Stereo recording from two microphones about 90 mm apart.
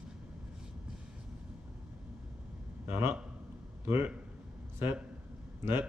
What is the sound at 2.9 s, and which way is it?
A man's voice, 30° right (ahead or behind).